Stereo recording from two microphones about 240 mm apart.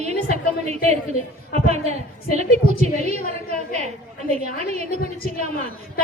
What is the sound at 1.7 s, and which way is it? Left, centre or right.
Speech, right.